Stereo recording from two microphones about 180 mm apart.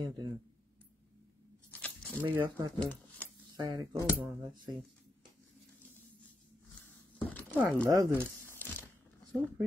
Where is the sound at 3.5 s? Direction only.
25° right (ahead or behind).